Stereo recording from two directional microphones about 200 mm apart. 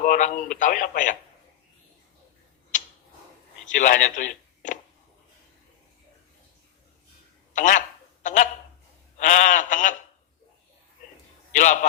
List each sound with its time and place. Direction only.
0.0 s speech: 40° left (ahead or behind)
2.7 s tick-tock: 40° left (ahead or behind)
3.7 s a man's voice: 40° left (ahead or behind)
7.5 s a sound: 40° left (ahead or behind)
9.1 s speech: 40° left (ahead or behind)
11.5 s speech: 40° left (ahead or behind)